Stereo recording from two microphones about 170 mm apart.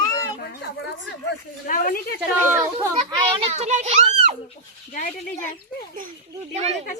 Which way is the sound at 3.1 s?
35° right (ahead or behind).